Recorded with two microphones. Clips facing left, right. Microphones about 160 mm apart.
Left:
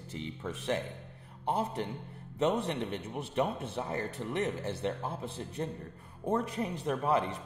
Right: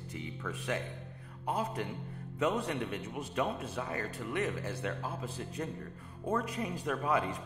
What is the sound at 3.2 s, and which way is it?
Speech, 25° left (ahead or behind).